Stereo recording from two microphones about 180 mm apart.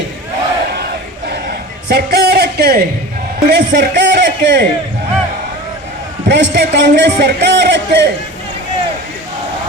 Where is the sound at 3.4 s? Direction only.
65° right (ahead or behind).